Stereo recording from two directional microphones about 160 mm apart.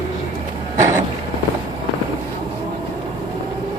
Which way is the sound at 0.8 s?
20° right (ahead or behind).